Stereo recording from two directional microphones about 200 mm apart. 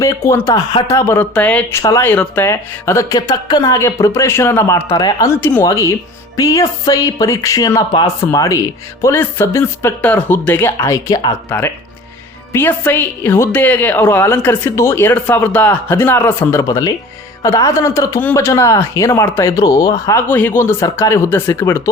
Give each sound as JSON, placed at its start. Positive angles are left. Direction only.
{"t": 0.0, "sound": "a woman's voice", "side_deg": 15}